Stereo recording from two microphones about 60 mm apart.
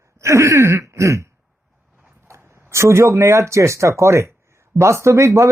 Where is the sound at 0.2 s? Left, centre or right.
Right.